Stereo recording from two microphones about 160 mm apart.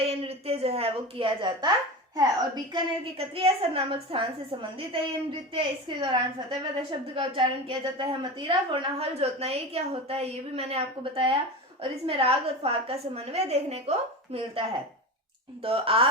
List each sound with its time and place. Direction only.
0.0 s a woman's voice: 40° right (ahead or behind)
15.6 s a woman's voice: 35° right (ahead or behind)